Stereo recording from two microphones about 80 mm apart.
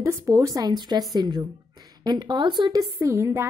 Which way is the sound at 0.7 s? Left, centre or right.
Right.